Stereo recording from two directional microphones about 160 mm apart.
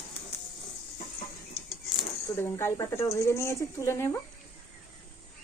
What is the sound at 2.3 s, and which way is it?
Speech, 15° left (ahead or behind).